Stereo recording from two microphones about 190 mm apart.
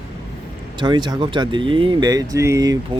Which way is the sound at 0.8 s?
25° right (ahead or behind).